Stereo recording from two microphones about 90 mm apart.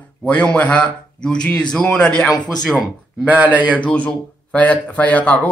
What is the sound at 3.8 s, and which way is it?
A man's voice, 15° left (ahead or behind).